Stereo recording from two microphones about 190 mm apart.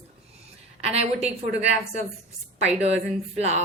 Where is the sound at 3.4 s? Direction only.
35° right (ahead or behind).